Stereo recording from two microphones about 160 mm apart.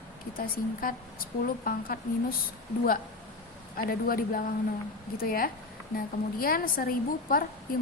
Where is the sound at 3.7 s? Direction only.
65° left (ahead or behind).